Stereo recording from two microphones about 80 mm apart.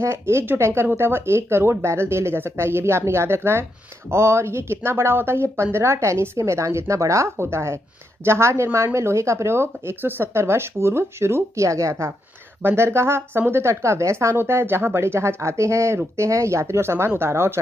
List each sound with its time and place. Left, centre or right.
0.0 s speech: right